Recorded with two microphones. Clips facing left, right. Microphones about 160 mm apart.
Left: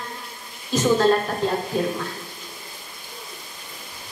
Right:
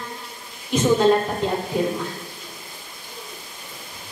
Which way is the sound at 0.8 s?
20° right (ahead or behind).